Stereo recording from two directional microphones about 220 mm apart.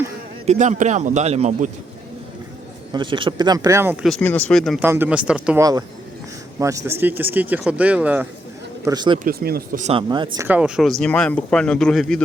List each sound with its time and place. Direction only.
0.4 s a man's voice: 35° right (ahead or behind)
2.9 s speech: 20° right (ahead or behind)
4.0 s speech: 5° left (ahead or behind)
8.8 s speech: 20° right (ahead or behind)
9.1 s speech: 40° right (ahead or behind)
9.8 s speech: 25° right (ahead or behind); by 12.2 s centre (ahead or behind)